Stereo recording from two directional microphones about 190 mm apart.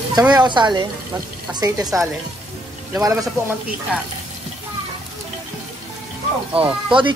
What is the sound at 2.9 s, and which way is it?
Speech, 15° right (ahead or behind).